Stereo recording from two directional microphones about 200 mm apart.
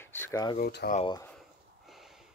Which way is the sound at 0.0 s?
10° left (ahead or behind).